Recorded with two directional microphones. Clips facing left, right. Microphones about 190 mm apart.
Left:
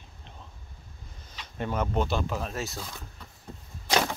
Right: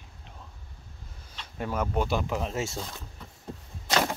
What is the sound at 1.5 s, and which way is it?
Speech, 5° right (ahead or behind).